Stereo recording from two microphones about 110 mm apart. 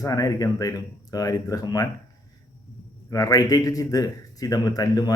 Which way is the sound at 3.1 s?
30° left (ahead or behind).